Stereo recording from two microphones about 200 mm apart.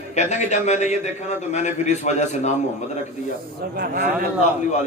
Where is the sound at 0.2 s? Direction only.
35° left (ahead or behind).